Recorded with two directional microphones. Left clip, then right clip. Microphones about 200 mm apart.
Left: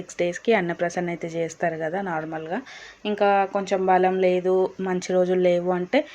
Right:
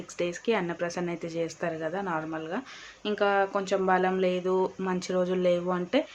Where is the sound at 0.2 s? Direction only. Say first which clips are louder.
Left 7 dB; 20° left (ahead or behind).